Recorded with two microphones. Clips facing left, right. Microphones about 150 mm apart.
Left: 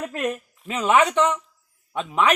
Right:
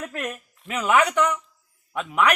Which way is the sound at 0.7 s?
25° left (ahead or behind).